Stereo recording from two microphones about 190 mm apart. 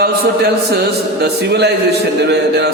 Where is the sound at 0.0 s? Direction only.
55° right (ahead or behind).